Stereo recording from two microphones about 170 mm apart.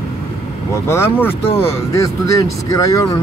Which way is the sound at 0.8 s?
15° left (ahead or behind).